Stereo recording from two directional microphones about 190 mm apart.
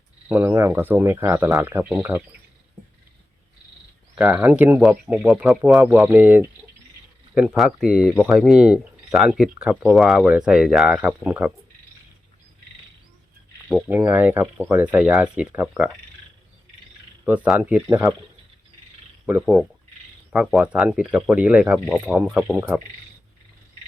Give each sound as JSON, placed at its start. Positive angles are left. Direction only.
{"t": 0.3, "sound": "speech", "side_deg": -10}
{"t": 4.1, "sound": "speech", "side_deg": -5}
{"t": 13.7, "sound": "speech", "side_deg": -10}
{"t": 17.2, "sound": "speech", "side_deg": -5}
{"t": 17.8, "sound": "speech", "side_deg": -15}
{"t": 19.2, "sound": "speech", "side_deg": -5}